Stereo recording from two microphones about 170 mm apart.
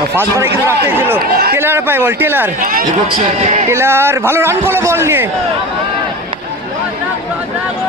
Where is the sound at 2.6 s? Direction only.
55° right (ahead or behind).